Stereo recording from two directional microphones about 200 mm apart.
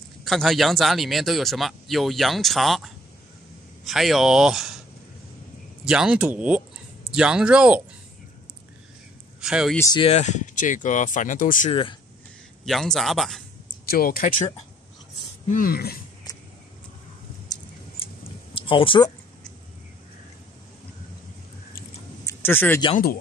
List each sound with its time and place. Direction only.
0.2 s speech: centre (ahead or behind)
5.9 s speech: 5° right (ahead or behind)
9.4 s speech: 5° right (ahead or behind)
9.8 s speech: 20° left (ahead or behind)
10.0 s speech: 35° left (ahead or behind)
11.7 s speech: 25° left (ahead or behind)
12.6 s speech: centre (ahead or behind)
13.8 s speech: 45° left (ahead or behind)
15.5 s speech: 45° left (ahead or behind)
18.5 s speech: 25° left (ahead or behind)
22.2 s a sound: 10° left (ahead or behind)